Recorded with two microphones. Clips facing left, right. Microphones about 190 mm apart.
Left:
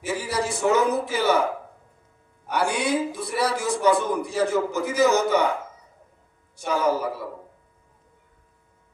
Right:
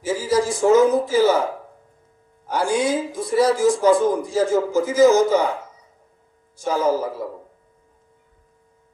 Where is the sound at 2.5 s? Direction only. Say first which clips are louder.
Right 3 dB; 65° left (ahead or behind).